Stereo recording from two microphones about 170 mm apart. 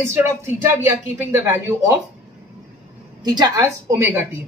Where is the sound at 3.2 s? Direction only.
25° right (ahead or behind).